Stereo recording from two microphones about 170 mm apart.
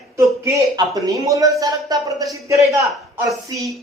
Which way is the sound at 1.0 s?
20° right (ahead or behind).